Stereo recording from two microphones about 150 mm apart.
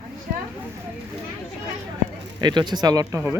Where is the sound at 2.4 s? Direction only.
30° right (ahead or behind).